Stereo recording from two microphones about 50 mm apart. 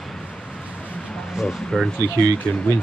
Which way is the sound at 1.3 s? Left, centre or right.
Centre.